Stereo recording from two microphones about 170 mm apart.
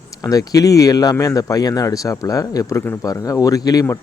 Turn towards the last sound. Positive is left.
turn(degrees=20)  # may be behind; listen again after turning